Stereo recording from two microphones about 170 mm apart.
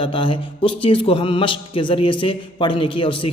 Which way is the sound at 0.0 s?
30° left (ahead or behind).